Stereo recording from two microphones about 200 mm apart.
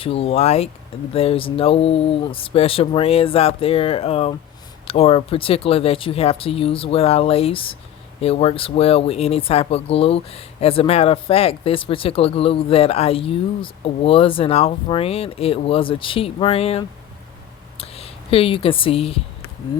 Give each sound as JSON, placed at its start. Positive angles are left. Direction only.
{"t": 0.0, "sound": "speech", "side_deg": 30}